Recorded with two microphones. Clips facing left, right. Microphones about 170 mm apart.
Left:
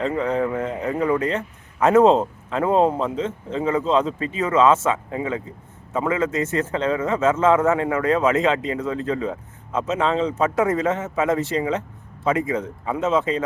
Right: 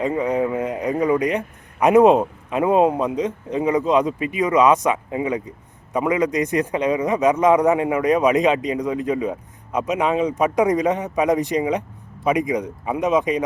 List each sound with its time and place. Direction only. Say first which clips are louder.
0.0 s a man's voice: right 1 dB; 15° right (ahead or behind)